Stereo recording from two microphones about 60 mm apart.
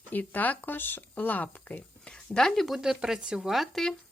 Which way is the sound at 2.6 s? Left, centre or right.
Centre.